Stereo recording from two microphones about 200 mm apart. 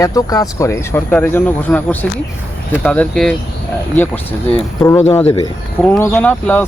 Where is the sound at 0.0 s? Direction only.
15° left (ahead or behind).